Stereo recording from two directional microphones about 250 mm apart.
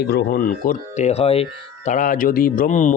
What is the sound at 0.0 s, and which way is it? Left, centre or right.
Speech, left.